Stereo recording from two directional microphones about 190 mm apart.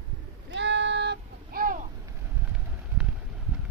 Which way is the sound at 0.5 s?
70° right (ahead or behind).